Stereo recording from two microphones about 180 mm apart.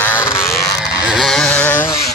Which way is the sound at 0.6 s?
Centre (ahead or behind).